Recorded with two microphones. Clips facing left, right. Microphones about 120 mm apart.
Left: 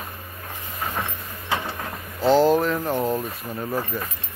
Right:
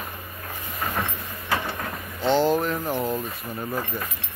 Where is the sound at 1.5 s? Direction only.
20° left (ahead or behind).